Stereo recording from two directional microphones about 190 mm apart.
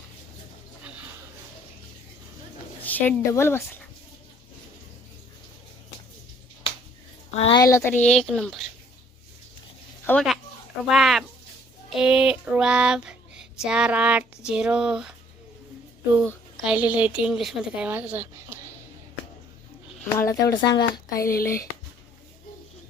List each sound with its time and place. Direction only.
2.8 s speech: 10° left (ahead or behind)
7.3 s a woman's voice: 30° left (ahead or behind)
7.6 s a sound: 15° left (ahead or behind)
10.1 s speech: centre (ahead or behind)
10.8 s a sound: centre (ahead or behind)
11.9 s child singing: 5° right (ahead or behind)
13.7 s a sound: 5° right (ahead or behind)
16.1 s a woman's voice: 10° right (ahead or behind)
20.1 s speech: 15° left (ahead or behind)